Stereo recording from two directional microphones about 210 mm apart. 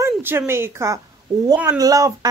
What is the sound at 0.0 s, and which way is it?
A woman's voice, 10° right (ahead or behind).